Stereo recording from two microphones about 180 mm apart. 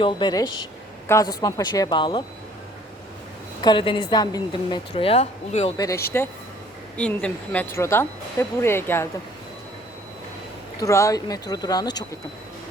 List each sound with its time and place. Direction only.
0.0 s a woman's voice: 25° left (ahead or behind)
3.6 s a woman's voice: 25° left (ahead or behind)
5.7 s a woman's voice: 20° left (ahead or behind)
6.9 s speech: 5° left (ahead or behind)
10.8 s a woman's voice: 15° left (ahead or behind)